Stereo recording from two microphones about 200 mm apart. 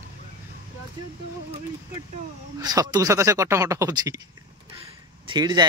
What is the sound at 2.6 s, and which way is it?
Speech, 20° right (ahead or behind).